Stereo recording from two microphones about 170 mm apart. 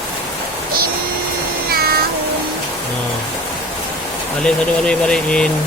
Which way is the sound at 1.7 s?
65° right (ahead or behind).